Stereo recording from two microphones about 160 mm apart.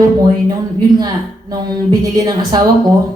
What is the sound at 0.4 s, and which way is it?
A woman's voice, 25° right (ahead or behind).